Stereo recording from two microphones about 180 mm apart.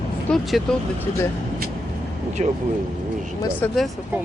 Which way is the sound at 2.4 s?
35° right (ahead or behind).